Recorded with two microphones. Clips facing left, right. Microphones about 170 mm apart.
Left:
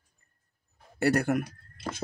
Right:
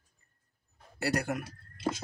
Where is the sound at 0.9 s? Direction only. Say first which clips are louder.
Left 7 dB; 55° left (ahead or behind).